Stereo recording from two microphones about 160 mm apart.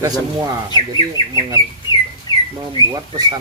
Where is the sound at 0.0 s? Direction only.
25° right (ahead or behind).